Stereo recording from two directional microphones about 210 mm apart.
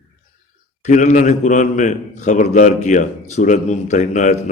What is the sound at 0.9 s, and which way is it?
A man's voice, 35° left (ahead or behind).